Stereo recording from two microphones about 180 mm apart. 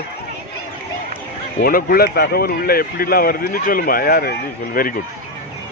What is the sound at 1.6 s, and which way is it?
Speech, 55° left (ahead or behind).